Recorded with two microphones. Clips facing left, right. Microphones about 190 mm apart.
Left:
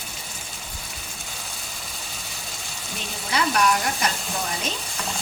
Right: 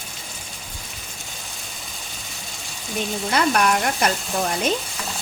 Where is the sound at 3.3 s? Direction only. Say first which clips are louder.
Right 2 dB; 55° right (ahead or behind).